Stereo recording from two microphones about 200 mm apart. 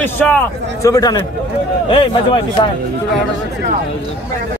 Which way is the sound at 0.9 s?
20° left (ahead or behind).